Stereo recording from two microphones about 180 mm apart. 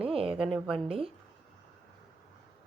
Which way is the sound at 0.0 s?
30° right (ahead or behind).